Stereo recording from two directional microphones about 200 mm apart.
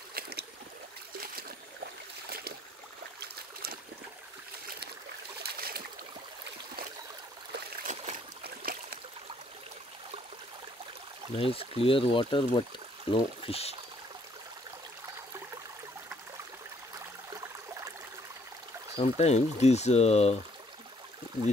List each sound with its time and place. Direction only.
0.1 s boat: 55° right (ahead or behind)
5.4 s boat: 50° right (ahead or behind)
7.5 s boat: 35° right (ahead or behind)
8.5 s a sound: 50° right (ahead or behind)
11.3 s speech: 25° left (ahead or behind)
18.9 s speech: 30° left (ahead or behind)